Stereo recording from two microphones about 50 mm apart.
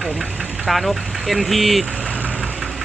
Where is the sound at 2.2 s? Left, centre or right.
Right.